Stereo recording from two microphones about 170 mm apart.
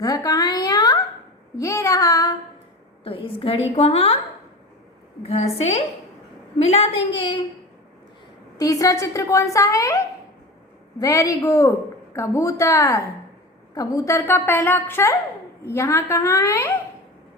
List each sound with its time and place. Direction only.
0.0 s a sound: 20° left (ahead or behind)
1.5 s child singing: 15° left (ahead or behind)
3.0 s a woman's voice: 30° left (ahead or behind)
5.2 s a woman's voice: 40° left (ahead or behind)
8.5 s a woman's voice: 20° left (ahead or behind)